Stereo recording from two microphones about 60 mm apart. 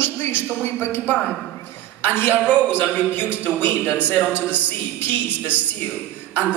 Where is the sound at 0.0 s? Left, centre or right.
Left.